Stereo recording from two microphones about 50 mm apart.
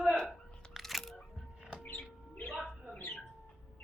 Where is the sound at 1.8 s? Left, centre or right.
Left.